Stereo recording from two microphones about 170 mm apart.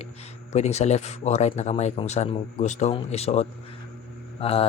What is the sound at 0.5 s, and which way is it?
Speech, 40° left (ahead or behind).